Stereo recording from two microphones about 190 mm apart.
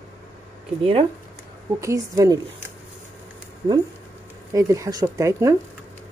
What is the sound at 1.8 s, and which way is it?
Speech, 15° right (ahead or behind).